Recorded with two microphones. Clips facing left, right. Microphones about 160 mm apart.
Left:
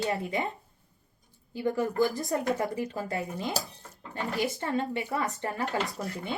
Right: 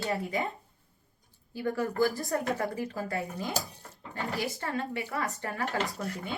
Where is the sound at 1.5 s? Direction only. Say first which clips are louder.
Left 2 dB; 20° left (ahead or behind).